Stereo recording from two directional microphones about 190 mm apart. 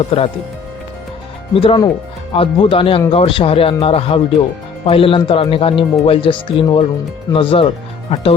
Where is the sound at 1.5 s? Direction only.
25° left (ahead or behind).